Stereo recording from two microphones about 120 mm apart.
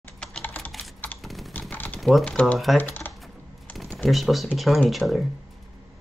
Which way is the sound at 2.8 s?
15° left (ahead or behind).